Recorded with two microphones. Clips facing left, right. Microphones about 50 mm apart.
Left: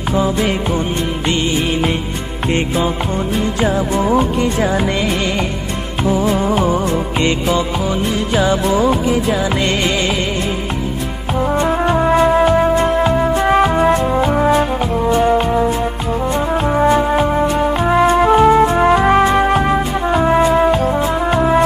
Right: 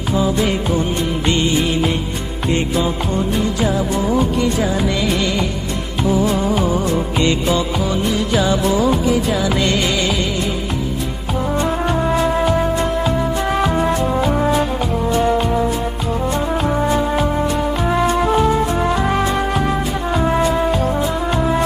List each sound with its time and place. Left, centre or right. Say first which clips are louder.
4.1 s music: even; left
6.2 s music: left 2 dB; centre
8.7 s music: left 1 dB; centre
11.6 s brass instrument: left 4 dB; left
12.2 s music: left 5 dB; left
17.2 s music: left 3 dB; left
21.3 s brass instrument: left 6 dB; left